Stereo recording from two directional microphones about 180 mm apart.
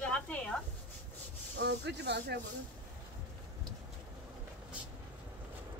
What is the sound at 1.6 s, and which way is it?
Speech, 70° right (ahead or behind).